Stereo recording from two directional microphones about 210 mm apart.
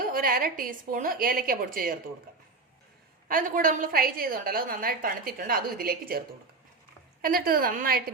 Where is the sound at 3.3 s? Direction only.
40° right (ahead or behind).